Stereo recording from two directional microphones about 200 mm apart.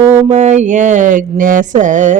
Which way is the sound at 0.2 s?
35° right (ahead or behind).